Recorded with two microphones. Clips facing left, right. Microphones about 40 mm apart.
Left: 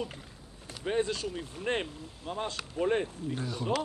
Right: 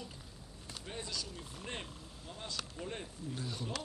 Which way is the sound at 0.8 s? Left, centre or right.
Left.